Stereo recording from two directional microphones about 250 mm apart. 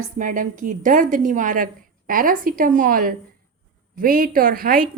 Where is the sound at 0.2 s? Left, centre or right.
Right.